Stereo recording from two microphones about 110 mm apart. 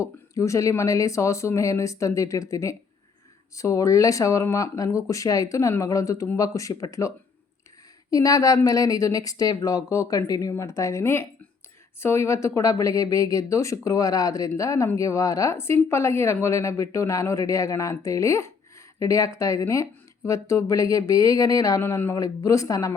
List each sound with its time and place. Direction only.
0.0 s speech: 30° left (ahead or behind)
8.1 s a woman's voice: 30° left (ahead or behind)